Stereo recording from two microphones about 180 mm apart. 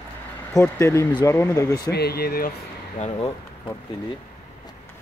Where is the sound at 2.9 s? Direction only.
35° left (ahead or behind).